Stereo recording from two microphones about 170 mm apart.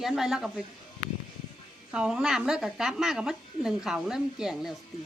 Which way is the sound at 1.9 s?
5° right (ahead or behind).